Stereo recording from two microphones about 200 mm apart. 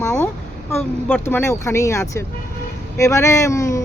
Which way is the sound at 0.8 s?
5° left (ahead or behind).